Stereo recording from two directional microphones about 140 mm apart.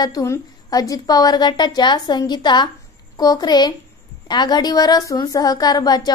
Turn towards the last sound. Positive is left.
turn(degrees=30)  # may be behind; listen again after turning